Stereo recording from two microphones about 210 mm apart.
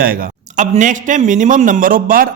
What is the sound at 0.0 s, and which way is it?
Speech, 45° right (ahead or behind).